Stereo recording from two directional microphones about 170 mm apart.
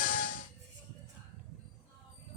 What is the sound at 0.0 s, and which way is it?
Music, 55° left (ahead or behind).